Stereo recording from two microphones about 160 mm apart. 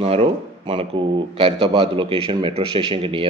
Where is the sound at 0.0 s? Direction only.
40° right (ahead or behind).